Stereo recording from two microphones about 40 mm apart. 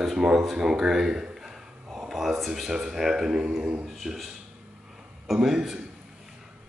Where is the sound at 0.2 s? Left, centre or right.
Centre.